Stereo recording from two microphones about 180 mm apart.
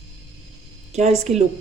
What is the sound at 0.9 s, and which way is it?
Speech, 40° right (ahead or behind).